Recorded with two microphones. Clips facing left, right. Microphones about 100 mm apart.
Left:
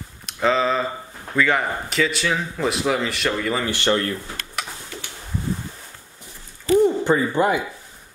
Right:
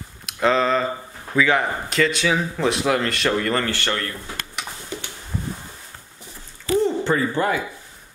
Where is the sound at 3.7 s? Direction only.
20° left (ahead or behind).